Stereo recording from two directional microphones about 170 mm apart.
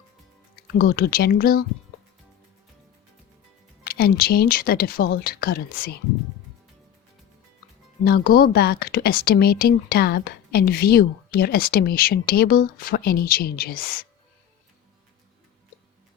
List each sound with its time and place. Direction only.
0.8 s a woman's voice: 60° left (ahead or behind)
3.8 s a woman's voice: 60° left (ahead or behind)
8.0 s a woman's voice: 60° left (ahead or behind)